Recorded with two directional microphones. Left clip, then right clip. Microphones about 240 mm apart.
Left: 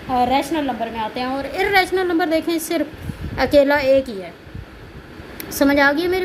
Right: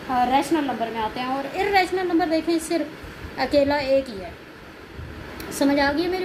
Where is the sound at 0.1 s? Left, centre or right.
Left.